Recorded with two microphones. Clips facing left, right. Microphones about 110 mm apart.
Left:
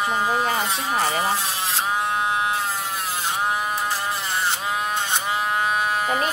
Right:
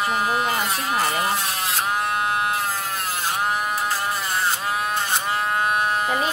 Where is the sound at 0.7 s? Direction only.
30° left (ahead or behind).